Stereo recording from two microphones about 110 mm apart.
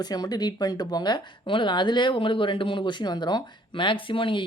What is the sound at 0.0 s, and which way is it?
Speech, 40° left (ahead or behind).